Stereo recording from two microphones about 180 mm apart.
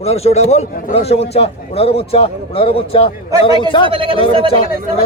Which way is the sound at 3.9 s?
30° right (ahead or behind).